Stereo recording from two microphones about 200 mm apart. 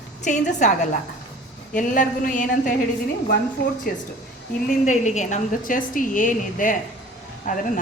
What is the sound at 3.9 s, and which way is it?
Speech, 50° left (ahead or behind).